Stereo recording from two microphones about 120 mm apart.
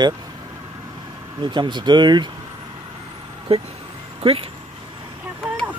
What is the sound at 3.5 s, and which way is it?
Speech, 55° right (ahead or behind).